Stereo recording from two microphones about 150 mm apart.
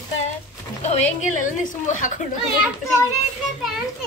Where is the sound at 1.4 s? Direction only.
60° left (ahead or behind).